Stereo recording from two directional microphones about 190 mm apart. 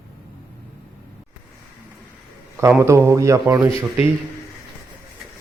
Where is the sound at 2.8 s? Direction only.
15° right (ahead or behind).